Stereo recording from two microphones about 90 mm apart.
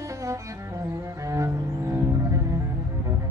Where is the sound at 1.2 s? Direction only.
35° right (ahead or behind).